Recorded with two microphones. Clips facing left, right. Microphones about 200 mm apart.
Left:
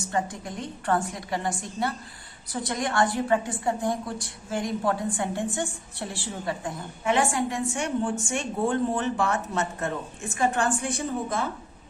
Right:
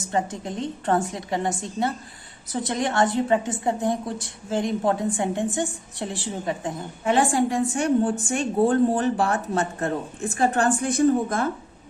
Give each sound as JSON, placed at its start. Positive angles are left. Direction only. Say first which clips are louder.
{"t": 0.1, "sound": "a woman's voice", "louder": "right 4 dB", "side_deg": -25}
{"t": 7.0, "sound": "a woman's voice", "louder": "right 4 dB", "side_deg": -35}